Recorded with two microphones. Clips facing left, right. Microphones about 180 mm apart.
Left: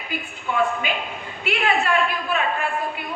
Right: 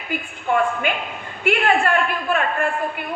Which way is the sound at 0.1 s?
55° right (ahead or behind).